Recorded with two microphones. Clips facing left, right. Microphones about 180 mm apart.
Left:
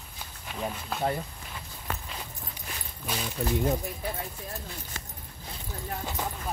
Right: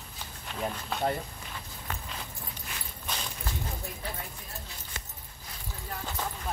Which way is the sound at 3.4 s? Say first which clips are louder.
Left 11 dB; 70° left (ahead or behind).